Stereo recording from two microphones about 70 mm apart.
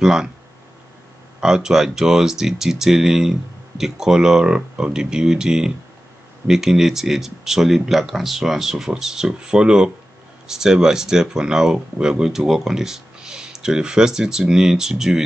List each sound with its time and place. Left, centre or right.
0.0 s speech: centre
1.4 s speech: centre